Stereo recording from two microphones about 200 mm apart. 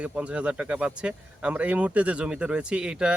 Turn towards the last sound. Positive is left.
turn(degrees=-5)  # may be behind; listen again after turning